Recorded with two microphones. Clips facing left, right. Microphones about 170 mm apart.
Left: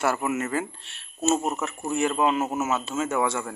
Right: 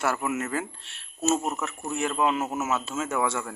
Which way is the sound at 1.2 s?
20° left (ahead or behind).